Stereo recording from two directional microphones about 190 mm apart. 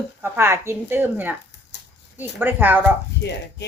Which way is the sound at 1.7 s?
65° left (ahead or behind).